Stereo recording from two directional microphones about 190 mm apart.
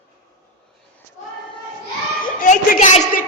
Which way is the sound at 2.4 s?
40° left (ahead or behind).